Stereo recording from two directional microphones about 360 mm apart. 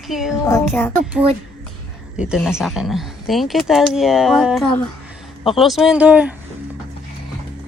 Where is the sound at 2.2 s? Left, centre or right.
Centre.